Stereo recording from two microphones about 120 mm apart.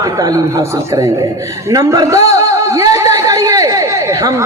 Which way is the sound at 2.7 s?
25° right (ahead or behind).